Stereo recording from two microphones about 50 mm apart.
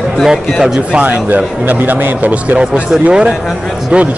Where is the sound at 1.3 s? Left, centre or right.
Right.